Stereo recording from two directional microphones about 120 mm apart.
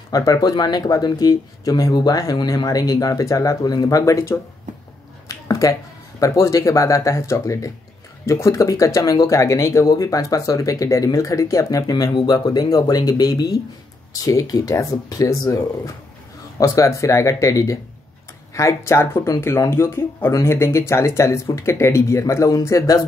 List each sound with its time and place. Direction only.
0.1 s speech: 30° left (ahead or behind)
5.5 s speech: 30° left (ahead or behind)